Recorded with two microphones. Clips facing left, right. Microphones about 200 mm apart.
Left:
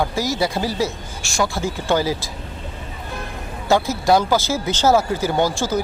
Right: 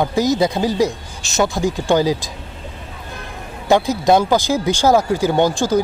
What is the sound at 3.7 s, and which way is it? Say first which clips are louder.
Speech: right 3 dB; 20° right (ahead or behind).